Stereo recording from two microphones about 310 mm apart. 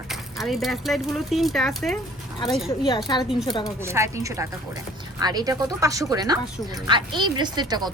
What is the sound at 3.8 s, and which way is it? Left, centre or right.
Speech, centre.